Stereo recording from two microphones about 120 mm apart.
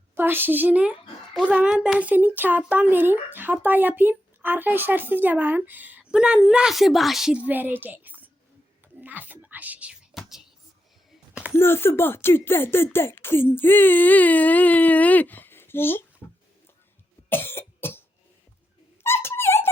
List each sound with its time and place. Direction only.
0.2 s speech: 15° right (ahead or behind)
9.0 s whispering: 15° right (ahead or behind)
10.2 s a sound: 5° right (ahead or behind)
11.5 s speech: 20° left (ahead or behind)
17.2 s cough: 20° left (ahead or behind)
19.0 s a sound: 20° left (ahead or behind)